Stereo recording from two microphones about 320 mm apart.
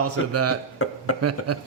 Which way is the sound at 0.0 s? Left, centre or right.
Right.